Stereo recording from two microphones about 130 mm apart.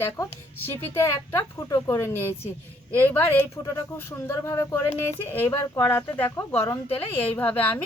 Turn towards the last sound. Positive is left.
turn(degrees=15)  # may be behind; listen again after turning